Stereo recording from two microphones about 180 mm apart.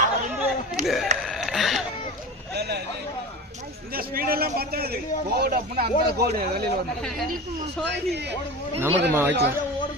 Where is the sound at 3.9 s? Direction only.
55° right (ahead or behind).